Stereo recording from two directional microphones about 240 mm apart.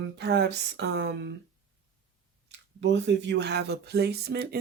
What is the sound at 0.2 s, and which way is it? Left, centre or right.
Speech, right.